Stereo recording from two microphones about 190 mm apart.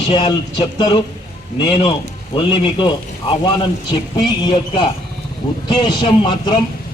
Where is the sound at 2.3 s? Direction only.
25° left (ahead or behind).